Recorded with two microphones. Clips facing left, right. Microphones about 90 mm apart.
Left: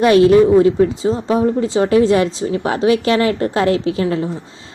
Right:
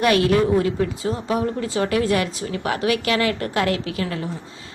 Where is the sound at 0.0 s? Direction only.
25° left (ahead or behind).